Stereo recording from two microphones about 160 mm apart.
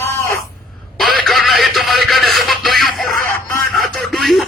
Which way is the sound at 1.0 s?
Centre (ahead or behind).